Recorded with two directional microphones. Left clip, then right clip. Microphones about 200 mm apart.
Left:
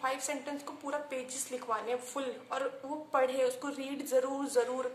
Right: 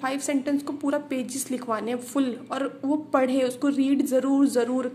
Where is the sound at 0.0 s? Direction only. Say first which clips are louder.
Right 8 dB; 35° right (ahead or behind).